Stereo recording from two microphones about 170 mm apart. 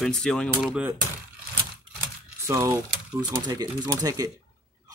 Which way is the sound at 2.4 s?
15° right (ahead or behind).